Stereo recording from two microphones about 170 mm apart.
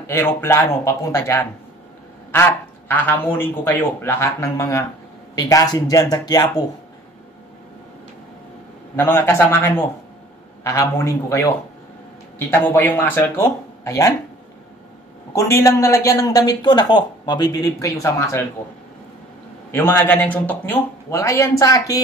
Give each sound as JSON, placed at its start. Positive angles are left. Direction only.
{"t": 0.0, "sound": "speech", "side_deg": 15}
{"t": 8.9, "sound": "speech", "side_deg": 15}
{"t": 15.3, "sound": "speech", "side_deg": 15}
{"t": 19.7, "sound": "speech", "side_deg": 15}